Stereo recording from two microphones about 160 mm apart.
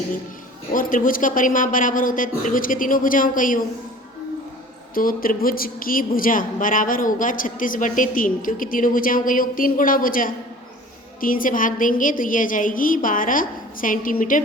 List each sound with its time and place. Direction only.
0.7 s speech: 55° left (ahead or behind)
4.9 s speech: 60° left (ahead or behind)